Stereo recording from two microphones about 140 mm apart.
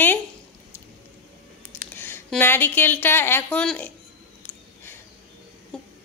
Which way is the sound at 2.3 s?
15° left (ahead or behind).